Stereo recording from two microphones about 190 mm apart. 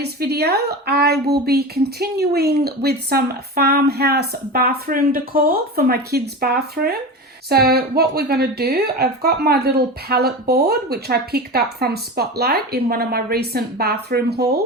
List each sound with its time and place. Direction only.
0.0 s speech: 60° right (ahead or behind)